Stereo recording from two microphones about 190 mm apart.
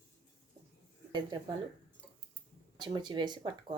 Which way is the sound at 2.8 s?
25° right (ahead or behind).